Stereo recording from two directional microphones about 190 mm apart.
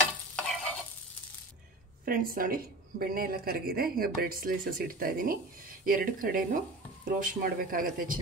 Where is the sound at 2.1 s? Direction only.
50° right (ahead or behind).